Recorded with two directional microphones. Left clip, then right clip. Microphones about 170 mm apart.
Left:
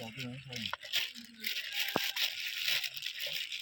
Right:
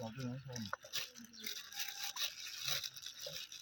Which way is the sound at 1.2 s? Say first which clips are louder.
Left 9 dB; 70° right (ahead or behind).